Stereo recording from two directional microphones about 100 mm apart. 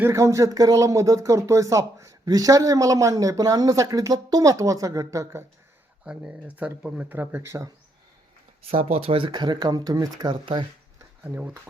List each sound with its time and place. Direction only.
0.0 s speech: 30° right (ahead or behind)
6.1 s speech: 10° right (ahead or behind)
7.2 s speech: 20° right (ahead or behind)
8.7 s speech: 75° right (ahead or behind); by 10.3 s 40° right (ahead or behind)
10.4 s speech: 55° right (ahead or behind)
11.2 s speech: 15° right (ahead or behind)